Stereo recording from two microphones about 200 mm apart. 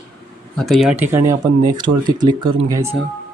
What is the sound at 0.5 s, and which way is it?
Speech, centre (ahead or behind).